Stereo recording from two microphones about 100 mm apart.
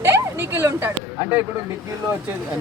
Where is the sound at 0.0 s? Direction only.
30° right (ahead or behind).